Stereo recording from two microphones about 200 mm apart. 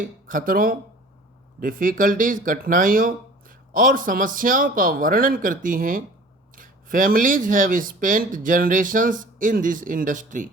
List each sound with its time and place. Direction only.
0.0 s speech: 40° right (ahead or behind)